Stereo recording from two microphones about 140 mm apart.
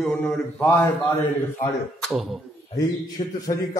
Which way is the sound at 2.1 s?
Centre (ahead or behind).